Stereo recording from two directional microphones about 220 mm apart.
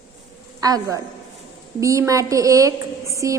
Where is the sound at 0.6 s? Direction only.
15° right (ahead or behind).